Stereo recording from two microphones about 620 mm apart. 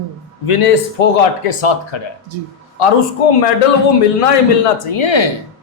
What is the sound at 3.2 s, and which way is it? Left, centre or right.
Speech, left.